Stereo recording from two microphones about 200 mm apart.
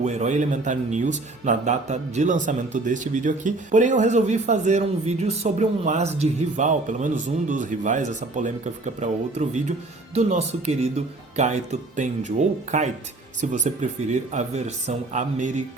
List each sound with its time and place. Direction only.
0.0 s speech: 35° right (ahead or behind)